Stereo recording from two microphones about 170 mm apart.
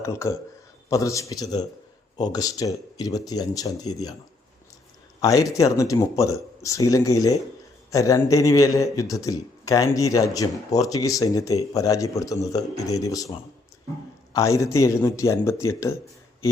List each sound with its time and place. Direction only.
0.0 s a man's voice: 15° left (ahead or behind)
5.2 s speech: 20° left (ahead or behind)
14.3 s a man's voice: 15° left (ahead or behind)